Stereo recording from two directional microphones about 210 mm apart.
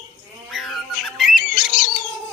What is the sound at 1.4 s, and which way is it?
Bird, 40° left (ahead or behind).